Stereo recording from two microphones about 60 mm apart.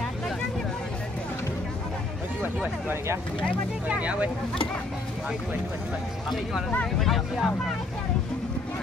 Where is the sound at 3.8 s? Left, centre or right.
Right.